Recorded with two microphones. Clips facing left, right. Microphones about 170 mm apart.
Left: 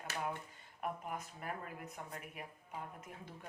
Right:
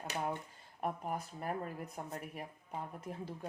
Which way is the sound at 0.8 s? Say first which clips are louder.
Right 4 dB; 35° right (ahead or behind).